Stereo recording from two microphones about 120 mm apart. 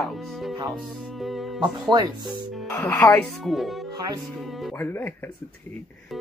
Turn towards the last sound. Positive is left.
turn(degrees=15)  # may be behind; listen again after turning